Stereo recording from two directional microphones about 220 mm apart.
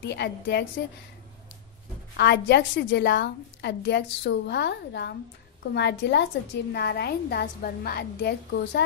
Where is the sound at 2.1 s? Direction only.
50° left (ahead or behind).